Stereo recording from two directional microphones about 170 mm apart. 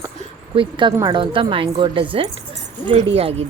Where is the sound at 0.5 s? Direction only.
30° right (ahead or behind).